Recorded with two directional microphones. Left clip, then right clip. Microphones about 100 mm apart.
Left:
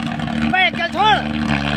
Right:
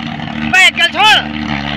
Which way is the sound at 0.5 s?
25° left (ahead or behind).